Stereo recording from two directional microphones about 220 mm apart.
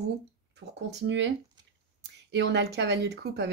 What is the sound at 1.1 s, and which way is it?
A woman's voice, 55° right (ahead or behind).